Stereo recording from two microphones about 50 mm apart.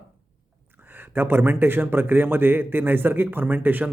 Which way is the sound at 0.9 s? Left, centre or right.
Right.